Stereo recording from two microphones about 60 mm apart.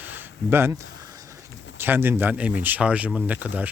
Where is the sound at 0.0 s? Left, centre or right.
Right.